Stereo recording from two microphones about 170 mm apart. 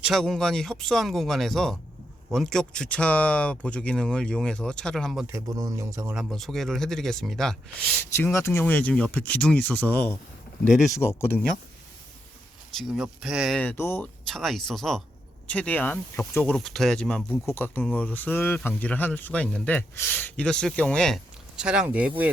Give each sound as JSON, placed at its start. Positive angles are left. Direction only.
{"t": 0.0, "sound": "speech", "side_deg": 0}
{"t": 5.2, "sound": "speech", "side_deg": -20}
{"t": 6.1, "sound": "speech", "side_deg": 0}
{"t": 8.1, "sound": "speech", "side_deg": 15}
{"t": 12.7, "sound": "speech", "side_deg": 0}
{"t": 13.6, "sound": "speech", "side_deg": 10}
{"t": 14.3, "sound": "speech", "side_deg": 0}